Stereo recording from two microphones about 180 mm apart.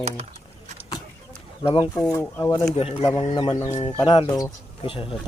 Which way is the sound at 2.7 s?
35° left (ahead or behind).